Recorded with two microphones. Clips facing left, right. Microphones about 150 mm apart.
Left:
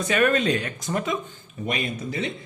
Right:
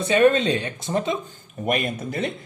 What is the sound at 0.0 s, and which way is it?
Speech, 25° right (ahead or behind).